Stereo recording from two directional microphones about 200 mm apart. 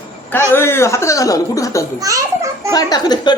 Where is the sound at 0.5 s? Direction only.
10° left (ahead or behind).